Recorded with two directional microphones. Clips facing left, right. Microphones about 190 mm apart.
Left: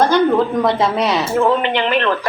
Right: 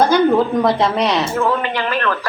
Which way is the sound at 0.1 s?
Centre (ahead or behind).